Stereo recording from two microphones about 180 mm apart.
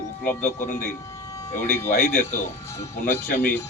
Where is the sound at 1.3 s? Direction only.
15° left (ahead or behind).